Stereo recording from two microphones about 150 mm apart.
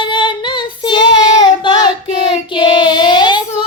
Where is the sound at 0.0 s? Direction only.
30° left (ahead or behind).